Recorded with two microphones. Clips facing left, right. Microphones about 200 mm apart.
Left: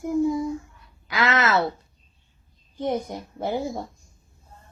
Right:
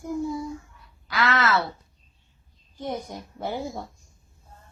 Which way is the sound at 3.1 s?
20° left (ahead or behind).